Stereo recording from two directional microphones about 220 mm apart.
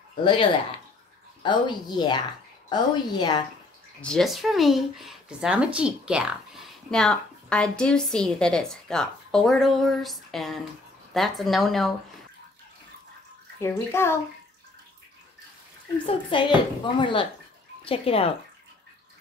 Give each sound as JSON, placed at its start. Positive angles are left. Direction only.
{"t": 1.4, "sound": "a woman's voice", "side_deg": 20}
{"t": 4.0, "sound": "speech", "side_deg": 0}
{"t": 13.6, "sound": "a child's voice", "side_deg": 10}
{"t": 16.1, "sound": "a woman's voice", "side_deg": 25}